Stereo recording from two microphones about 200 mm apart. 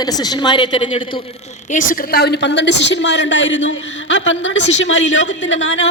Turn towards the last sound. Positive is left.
turn(degrees=70)  # may be behind; listen again after turning